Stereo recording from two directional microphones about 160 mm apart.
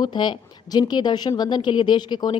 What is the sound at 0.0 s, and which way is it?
A woman's voice, 30° left (ahead or behind).